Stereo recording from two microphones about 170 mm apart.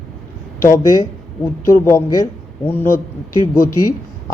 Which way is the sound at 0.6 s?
20° left (ahead or behind).